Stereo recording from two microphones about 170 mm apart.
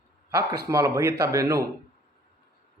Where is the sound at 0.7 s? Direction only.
15° right (ahead or behind).